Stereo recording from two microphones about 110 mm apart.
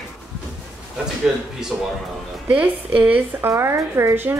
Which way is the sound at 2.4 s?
15° right (ahead or behind).